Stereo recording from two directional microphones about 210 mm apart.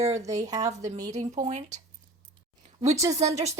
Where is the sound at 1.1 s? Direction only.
35° right (ahead or behind).